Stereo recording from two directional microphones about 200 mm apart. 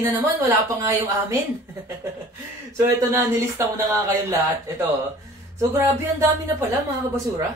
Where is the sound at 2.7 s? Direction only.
15° right (ahead or behind).